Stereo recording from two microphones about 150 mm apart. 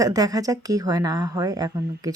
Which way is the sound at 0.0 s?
25° right (ahead or behind).